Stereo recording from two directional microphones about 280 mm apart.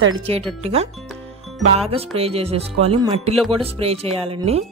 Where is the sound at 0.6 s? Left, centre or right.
Right.